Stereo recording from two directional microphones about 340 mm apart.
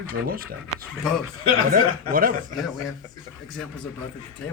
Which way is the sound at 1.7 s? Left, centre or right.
Right.